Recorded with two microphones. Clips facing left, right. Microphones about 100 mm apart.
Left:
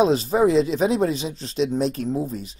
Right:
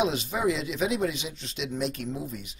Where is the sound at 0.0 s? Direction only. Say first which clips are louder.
Left 8 dB; 35° left (ahead or behind).